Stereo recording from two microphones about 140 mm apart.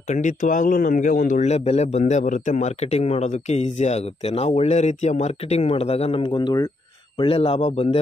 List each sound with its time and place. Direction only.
0.1 s speech: 60° left (ahead or behind); by 6.7 s 30° left (ahead or behind)
7.2 s speech: 45° left (ahead or behind)